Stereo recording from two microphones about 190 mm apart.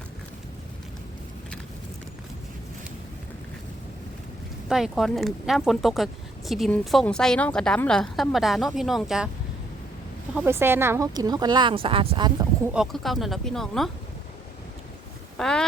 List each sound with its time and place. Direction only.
4.7 s a woman's voice: centre (ahead or behind)
10.3 s speech: 10° right (ahead or behind)
12.7 s a woman's voice: centre (ahead or behind)
15.4 s a woman's voice: 5° left (ahead or behind)